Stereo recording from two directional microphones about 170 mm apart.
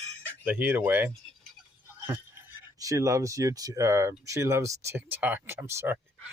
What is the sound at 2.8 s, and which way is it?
Speech, 20° right (ahead or behind).